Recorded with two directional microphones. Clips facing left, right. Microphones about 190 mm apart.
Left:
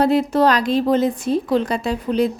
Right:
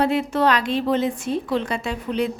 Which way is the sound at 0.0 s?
40° left (ahead or behind).